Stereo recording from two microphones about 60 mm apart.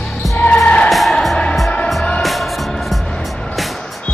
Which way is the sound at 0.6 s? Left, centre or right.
Left.